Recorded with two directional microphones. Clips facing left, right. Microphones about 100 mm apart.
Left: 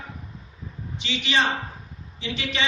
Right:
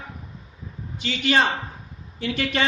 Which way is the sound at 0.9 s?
45° right (ahead or behind).